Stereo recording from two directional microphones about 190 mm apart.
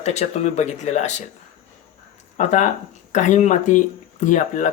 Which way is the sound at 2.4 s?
40° left (ahead or behind).